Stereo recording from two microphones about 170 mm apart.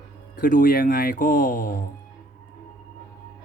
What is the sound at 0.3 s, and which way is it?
Speech, 55° left (ahead or behind).